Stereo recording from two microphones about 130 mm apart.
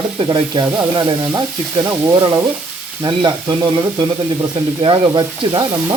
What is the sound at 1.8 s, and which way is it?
Speech, 20° right (ahead or behind).